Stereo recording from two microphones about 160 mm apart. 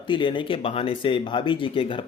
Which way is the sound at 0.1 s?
30° left (ahead or behind).